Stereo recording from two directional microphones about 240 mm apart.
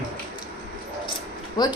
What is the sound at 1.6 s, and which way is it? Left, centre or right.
Speech, centre.